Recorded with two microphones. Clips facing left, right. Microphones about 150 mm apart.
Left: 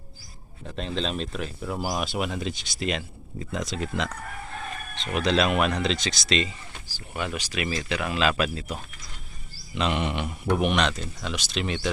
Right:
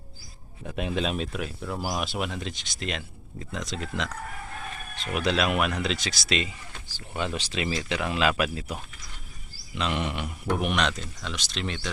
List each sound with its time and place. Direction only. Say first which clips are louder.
0.6 s speech: right 1 dB; 10° right (ahead or behind)
6.8 s speech: right 1 dB; 25° right (ahead or behind)
9.7 s speech: left 3 dB; centre (ahead or behind)